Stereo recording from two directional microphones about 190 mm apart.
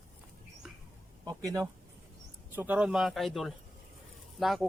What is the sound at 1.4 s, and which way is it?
Speech, 15° right (ahead or behind).